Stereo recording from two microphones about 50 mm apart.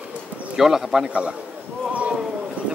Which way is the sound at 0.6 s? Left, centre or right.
Centre.